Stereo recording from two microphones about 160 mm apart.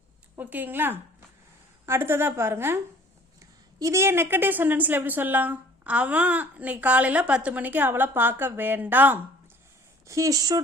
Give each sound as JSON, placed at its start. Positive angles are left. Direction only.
{"t": 0.3, "sound": "a woman's voice", "side_deg": -10}